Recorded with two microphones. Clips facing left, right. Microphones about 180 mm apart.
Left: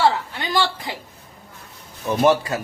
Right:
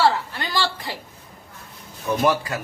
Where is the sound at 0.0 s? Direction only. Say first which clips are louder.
Left 1 dB; 15° left (ahead or behind).